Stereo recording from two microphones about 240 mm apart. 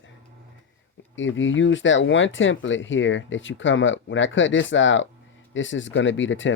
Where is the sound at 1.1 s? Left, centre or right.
Left.